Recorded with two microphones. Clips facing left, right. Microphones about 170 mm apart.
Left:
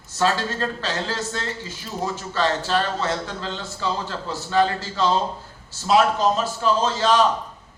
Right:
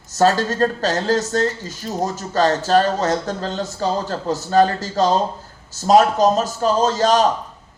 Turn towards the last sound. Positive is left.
turn(degrees=-40)  # may be behind; listen again after turning